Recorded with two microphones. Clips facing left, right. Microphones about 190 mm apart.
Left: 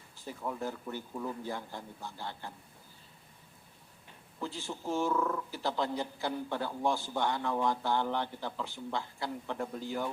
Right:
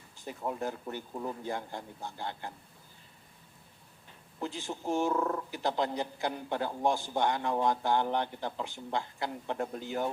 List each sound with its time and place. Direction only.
0.3 s speech: 20° right (ahead or behind)
4.4 s a man's voice: 15° right (ahead or behind)
5.1 s speech: 35° right (ahead or behind)
5.5 s a man's voice: 15° right (ahead or behind)